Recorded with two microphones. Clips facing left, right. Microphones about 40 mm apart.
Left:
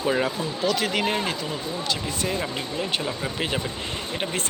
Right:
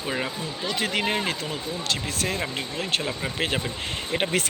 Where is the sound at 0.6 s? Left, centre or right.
Right.